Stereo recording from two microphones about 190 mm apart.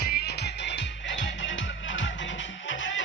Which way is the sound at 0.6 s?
75° left (ahead or behind).